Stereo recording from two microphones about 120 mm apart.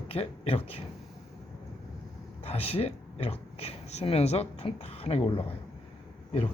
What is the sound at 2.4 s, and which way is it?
Speech, 60° left (ahead or behind).